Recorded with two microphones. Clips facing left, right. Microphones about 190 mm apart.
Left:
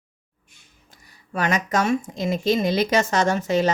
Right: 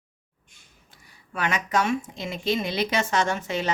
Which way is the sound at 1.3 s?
40° left (ahead or behind).